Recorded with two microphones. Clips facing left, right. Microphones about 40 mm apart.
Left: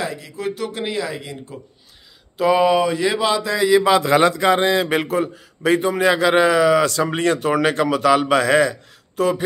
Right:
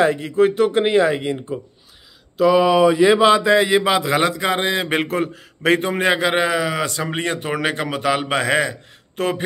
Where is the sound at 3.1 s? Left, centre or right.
Right.